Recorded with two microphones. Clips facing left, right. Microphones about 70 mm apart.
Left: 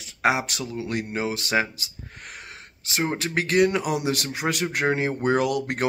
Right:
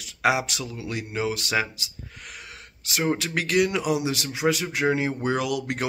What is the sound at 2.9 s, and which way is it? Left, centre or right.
Speech, left.